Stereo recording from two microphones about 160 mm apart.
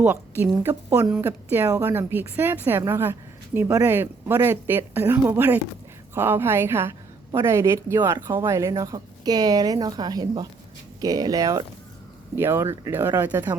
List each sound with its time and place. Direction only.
0.0 s a woman's voice: 15° right (ahead or behind)